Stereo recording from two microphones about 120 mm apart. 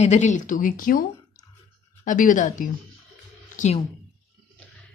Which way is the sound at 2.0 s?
90° left.